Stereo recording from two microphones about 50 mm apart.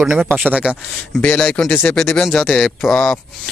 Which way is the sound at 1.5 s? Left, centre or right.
Centre.